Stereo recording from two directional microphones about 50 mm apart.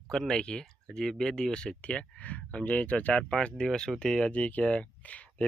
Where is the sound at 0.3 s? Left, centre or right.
Centre.